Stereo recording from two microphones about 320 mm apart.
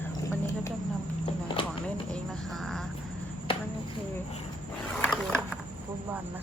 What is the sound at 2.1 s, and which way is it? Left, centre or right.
Speech, centre.